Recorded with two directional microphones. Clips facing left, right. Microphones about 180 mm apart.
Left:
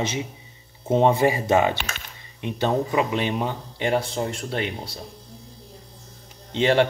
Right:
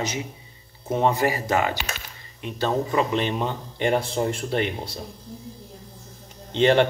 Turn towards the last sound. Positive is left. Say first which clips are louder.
# right 1 dB
turn(degrees=0)  # may be behind; listen again after turning